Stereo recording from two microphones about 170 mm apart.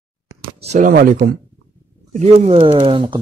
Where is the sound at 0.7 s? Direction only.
50° right (ahead or behind).